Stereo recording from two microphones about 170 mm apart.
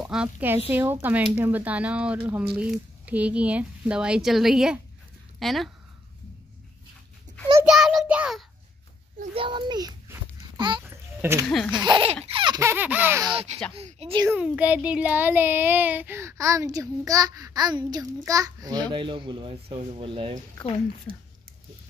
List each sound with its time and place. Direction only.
0.0 s child singing: 5° right (ahead or behind)
0.7 s speech: 10° right (ahead or behind)
5.4 s child singing: centre (ahead or behind)
7.6 s child singing: centre (ahead or behind)
9.3 s a child's voice: 30° right (ahead or behind)
10.8 s a sound: 15° right (ahead or behind)
11.4 s child singing: 5° left (ahead or behind)
11.7 s a child's voice: 25° right (ahead or behind)
12.3 s baby laughter: 30° right (ahead or behind)
12.5 s speech: 15° right (ahead or behind)
13.2 s speech: 30° right (ahead or behind)
14.2 s a child's voice: 10° right (ahead or behind); by 20.3 s 30° right (ahead or behind)